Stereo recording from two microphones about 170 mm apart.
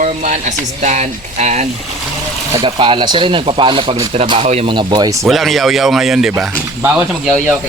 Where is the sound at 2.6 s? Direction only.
30° right (ahead or behind).